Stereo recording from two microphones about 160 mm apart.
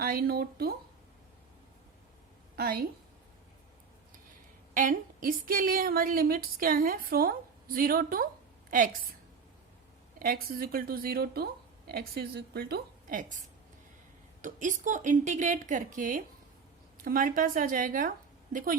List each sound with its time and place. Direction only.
0.0 s a woman's voice: 70° right (ahead or behind)
2.6 s a woman's voice: 65° right (ahead or behind)
4.7 s a woman's voice: 60° right (ahead or behind)
10.2 s a woman's voice: 65° right (ahead or behind)
14.4 s a woman's voice: 50° right (ahead or behind)